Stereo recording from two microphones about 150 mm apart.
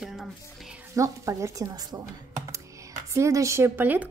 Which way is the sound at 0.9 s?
20° right (ahead or behind).